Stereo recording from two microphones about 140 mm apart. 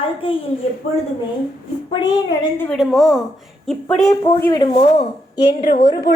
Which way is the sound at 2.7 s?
Centre (ahead or behind).